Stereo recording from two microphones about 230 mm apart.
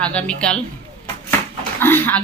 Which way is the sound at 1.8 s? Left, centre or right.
Centre.